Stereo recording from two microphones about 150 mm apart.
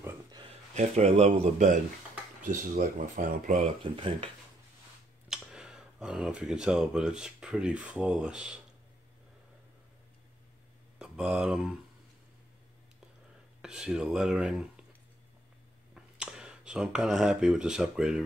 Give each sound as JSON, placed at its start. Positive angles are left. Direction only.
{"t": 0.3, "sound": "a sound", "side_deg": -35}
{"t": 0.7, "sound": "speech", "side_deg": -45}
{"t": 2.4, "sound": "speech", "side_deg": -60}
{"t": 3.8, "sound": "speech", "side_deg": -35}
{"t": 5.3, "sound": "speech", "side_deg": -5}
{"t": 11.0, "sound": "speech", "side_deg": -5}
{"t": 13.6, "sound": "speech", "side_deg": -5}
{"t": 15.9, "sound": "speech", "side_deg": -5}